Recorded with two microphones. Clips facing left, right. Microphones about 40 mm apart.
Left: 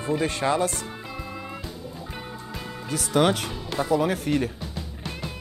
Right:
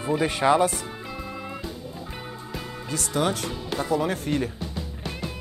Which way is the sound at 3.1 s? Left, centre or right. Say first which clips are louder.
Left 4 dB; left.